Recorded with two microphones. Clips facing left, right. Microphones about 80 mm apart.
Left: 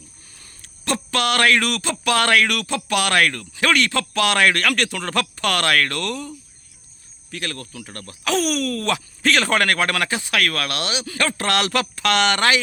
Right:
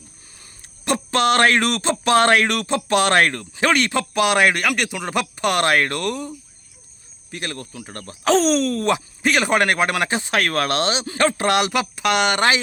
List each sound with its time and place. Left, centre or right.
0.3 s speech: right